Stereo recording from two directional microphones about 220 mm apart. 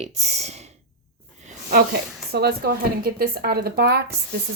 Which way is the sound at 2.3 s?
45° right (ahead or behind).